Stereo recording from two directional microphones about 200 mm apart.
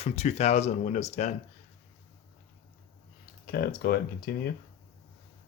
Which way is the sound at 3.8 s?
50° left (ahead or behind).